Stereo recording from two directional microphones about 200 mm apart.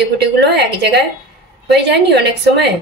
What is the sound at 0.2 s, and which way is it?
A woman's voice, 55° right (ahead or behind).